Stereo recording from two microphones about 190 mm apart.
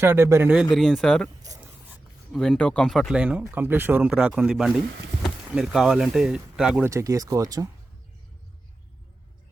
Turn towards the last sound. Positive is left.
turn(degrees=-20)  # may be behind; listen again after turning